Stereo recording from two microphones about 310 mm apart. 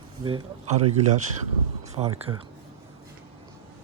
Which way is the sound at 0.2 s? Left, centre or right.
Centre.